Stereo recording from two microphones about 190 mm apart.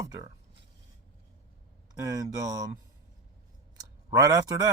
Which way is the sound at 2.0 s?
15° right (ahead or behind).